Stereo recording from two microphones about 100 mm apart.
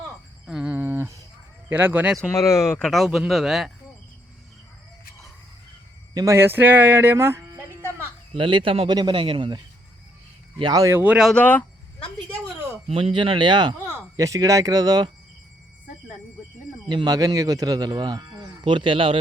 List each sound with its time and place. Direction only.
0.6 s a sound: 25° right (ahead or behind)
1.7 s speech: 20° right (ahead or behind)
2.3 s speech: 30° left (ahead or behind)
2.7 s speech: 5° left (ahead or behind)
6.1 s speech: 30° right (ahead or behind)
8.4 s speech: 55° right (ahead or behind)
8.9 s speech: 50° right (ahead or behind)
10.6 s speech: 40° right (ahead or behind)
10.9 s speech: 15° right (ahead or behind)
11.3 s speech: 15° left (ahead or behind)
12.9 s speech: 65° right (ahead or behind); by 13.7 s 50° right (ahead or behind)
13.7 s speech: 30° right (ahead or behind)
16.9 s speech: 45° right (ahead or behind)
18.6 s speech: 55° right (ahead or behind)